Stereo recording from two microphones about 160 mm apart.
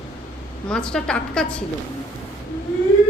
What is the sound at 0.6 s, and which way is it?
Speech, 5° left (ahead or behind).